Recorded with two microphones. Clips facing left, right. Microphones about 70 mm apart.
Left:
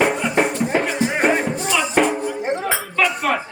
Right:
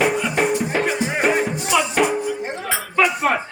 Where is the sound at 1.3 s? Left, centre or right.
Centre.